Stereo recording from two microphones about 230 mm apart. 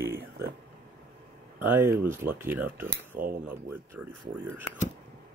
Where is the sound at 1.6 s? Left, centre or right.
Centre.